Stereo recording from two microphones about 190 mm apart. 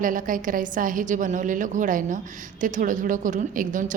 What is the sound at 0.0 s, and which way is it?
A woman's voice, 45° right (ahead or behind).